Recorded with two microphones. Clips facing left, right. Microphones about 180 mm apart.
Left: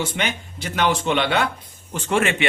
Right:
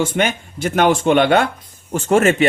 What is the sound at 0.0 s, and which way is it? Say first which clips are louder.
A man's voice: right 7 dB; 50° right (ahead or behind).